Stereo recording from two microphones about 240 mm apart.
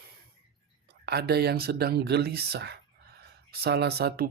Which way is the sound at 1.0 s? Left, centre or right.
Right.